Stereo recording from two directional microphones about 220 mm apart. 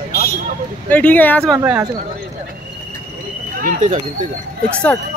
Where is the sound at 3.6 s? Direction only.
35° right (ahead or behind).